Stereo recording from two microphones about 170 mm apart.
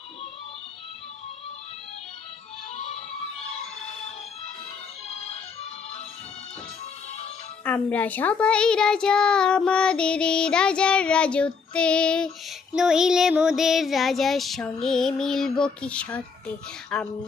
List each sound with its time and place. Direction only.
2.7 s music: 40° left (ahead or behind)
7.6 s a woman's voice: 10° left (ahead or behind)